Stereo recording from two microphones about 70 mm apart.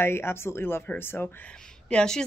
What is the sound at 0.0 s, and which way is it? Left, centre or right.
A woman's voice, left.